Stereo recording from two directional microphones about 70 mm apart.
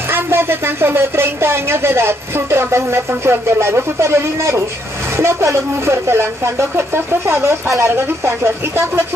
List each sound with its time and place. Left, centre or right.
0.1 s a woman's voice: right